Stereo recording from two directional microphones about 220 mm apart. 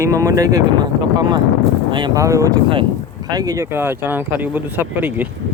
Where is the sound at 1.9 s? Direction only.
20° right (ahead or behind).